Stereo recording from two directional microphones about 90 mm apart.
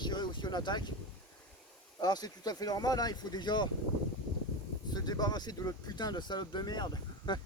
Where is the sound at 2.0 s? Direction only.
45° left (ahead or behind).